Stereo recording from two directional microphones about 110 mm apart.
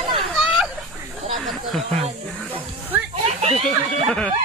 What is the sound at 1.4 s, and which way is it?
Speech, centre (ahead or behind).